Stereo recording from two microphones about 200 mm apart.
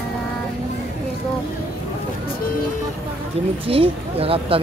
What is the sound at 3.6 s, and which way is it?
Speech, 30° right (ahead or behind).